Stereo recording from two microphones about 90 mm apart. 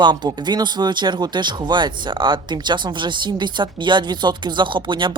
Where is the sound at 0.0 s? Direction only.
55° right (ahead or behind).